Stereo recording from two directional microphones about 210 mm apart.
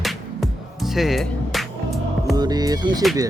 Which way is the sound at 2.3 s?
20° right (ahead or behind).